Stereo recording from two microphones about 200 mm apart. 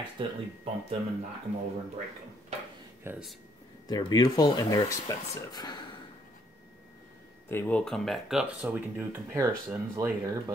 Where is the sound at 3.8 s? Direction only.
20° left (ahead or behind).